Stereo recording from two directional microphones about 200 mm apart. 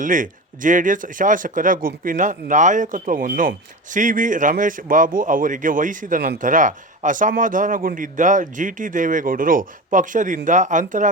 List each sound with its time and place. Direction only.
0.0 s speech: 40° right (ahead or behind)